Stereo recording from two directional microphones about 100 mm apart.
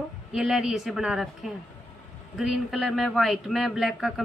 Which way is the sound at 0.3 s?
5° right (ahead or behind).